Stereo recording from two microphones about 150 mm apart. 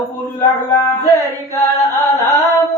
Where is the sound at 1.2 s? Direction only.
20° left (ahead or behind).